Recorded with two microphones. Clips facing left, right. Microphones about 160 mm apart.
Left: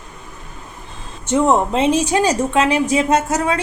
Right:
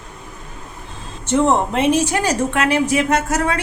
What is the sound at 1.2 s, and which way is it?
A woman's voice, 15° left (ahead or behind).